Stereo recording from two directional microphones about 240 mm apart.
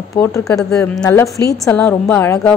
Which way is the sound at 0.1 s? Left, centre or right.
Centre.